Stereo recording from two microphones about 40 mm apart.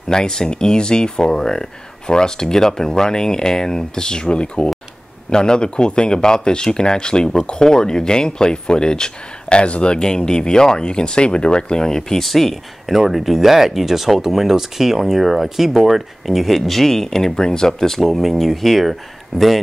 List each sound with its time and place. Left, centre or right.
0.1 s speech: centre